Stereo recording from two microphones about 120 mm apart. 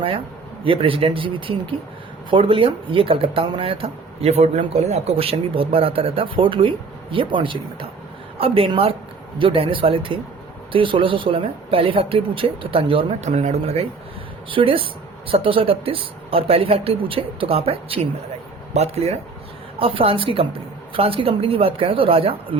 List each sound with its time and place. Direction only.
0.6 s speech: 50° right (ahead or behind)
13.2 s speech: 70° right (ahead or behind)
14.5 s speech: 50° right (ahead or behind)
19.8 s speech: 50° right (ahead or behind)